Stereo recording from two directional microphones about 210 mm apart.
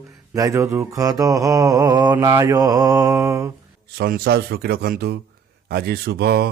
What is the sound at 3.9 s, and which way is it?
Speech, 50° right (ahead or behind).